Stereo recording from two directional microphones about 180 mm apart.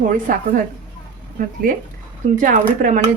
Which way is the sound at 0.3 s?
50° right (ahead or behind).